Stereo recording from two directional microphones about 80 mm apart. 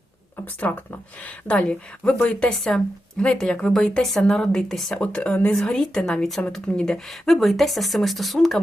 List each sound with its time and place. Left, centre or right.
0.7 s a woman's voice: left; by 4.9 s centre
4.9 s a woman's voice: centre